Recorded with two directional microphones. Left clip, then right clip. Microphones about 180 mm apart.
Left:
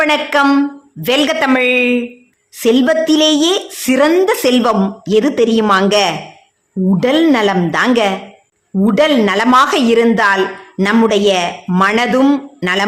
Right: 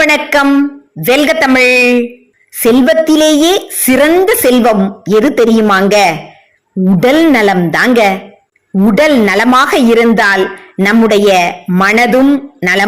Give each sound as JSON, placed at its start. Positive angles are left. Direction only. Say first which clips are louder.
{"t": 0.0, "sound": "a woman's voice", "louder": "right 3 dB", "side_deg": -20}